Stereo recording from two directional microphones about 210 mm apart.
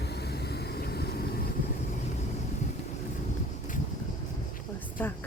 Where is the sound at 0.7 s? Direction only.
50° left (ahead or behind).